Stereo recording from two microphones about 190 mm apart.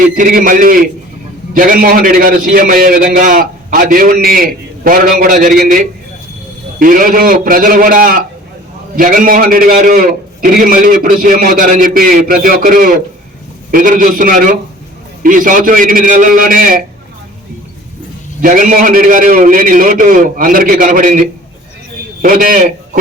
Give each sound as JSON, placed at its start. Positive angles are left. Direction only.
{"t": 0.0, "sound": "a man's voice", "side_deg": -45}
{"t": 18.4, "sound": "a man's voice", "side_deg": -45}
{"t": 22.2, "sound": "a man's voice", "side_deg": -45}